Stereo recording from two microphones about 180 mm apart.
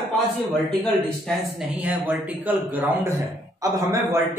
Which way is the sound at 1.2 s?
5° right (ahead or behind).